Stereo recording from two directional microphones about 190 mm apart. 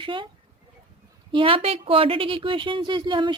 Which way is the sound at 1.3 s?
30° right (ahead or behind).